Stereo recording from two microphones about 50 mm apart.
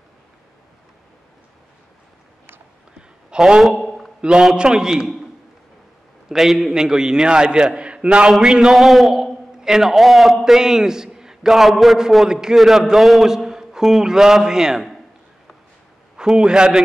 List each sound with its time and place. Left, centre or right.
3.0 s a sound: centre
3.7 s a sound: centre
4.2 s a man's voice: centre
6.2 s a man's voice: centre
8.3 s a man's voice: centre
12.3 s a man's voice: centre
16.2 s a man's voice: centre